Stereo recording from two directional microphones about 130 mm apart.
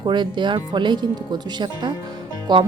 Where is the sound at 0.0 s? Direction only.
35° right (ahead or behind).